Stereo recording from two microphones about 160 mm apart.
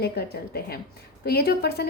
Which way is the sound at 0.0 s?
75° left (ahead or behind).